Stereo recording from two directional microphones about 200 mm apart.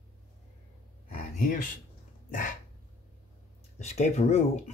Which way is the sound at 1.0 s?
45° left (ahead or behind).